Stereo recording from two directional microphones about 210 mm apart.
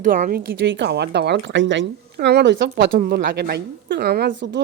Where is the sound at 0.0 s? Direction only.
40° right (ahead or behind).